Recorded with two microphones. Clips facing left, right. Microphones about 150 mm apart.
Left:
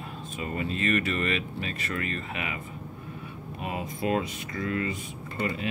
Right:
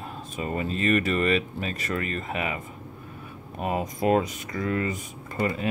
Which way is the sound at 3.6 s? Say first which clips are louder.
Right 5 dB; 40° right (ahead or behind).